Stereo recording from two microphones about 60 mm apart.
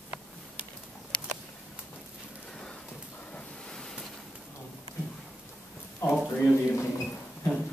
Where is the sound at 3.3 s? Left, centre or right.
Centre.